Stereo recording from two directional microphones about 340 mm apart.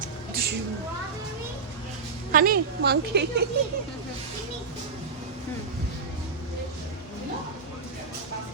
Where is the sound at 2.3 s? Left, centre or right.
Right.